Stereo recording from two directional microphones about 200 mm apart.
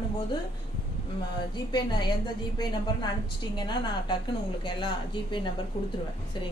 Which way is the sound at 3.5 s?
20° left (ahead or behind).